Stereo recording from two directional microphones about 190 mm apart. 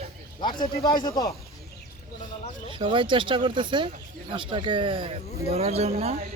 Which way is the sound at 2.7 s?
25° right (ahead or behind).